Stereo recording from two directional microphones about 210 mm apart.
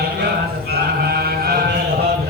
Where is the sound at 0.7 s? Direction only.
50° right (ahead or behind).